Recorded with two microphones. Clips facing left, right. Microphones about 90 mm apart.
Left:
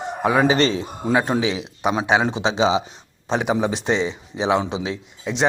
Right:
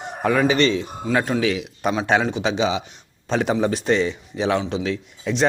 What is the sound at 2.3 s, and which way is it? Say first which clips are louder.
Speech: left 2 dB; 30° left (ahead or behind).